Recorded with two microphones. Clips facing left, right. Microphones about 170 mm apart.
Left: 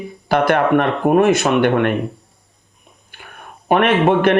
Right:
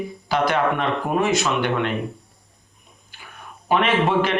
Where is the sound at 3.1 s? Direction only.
55° left (ahead or behind).